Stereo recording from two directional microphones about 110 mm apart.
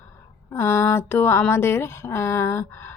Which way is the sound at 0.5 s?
25° left (ahead or behind).